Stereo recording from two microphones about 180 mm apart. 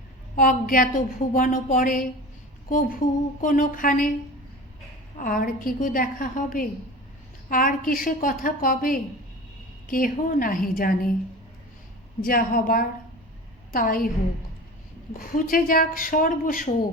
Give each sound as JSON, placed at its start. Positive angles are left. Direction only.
{"t": 0.3, "sound": "a woman's voice", "side_deg": 50}
{"t": 5.1, "sound": "a woman's voice", "side_deg": 50}
{"t": 12.2, "sound": "a woman's voice", "side_deg": 50}
{"t": 15.1, "sound": "a woman's voice", "side_deg": 50}